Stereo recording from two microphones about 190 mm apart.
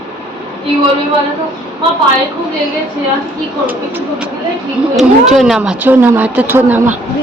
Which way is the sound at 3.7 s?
10° right (ahead or behind).